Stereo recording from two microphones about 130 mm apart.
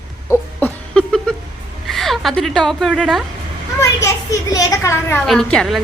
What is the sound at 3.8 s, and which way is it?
A child's voice, 25° left (ahead or behind).